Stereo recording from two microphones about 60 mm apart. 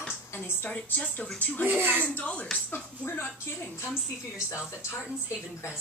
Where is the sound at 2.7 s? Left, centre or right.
Left.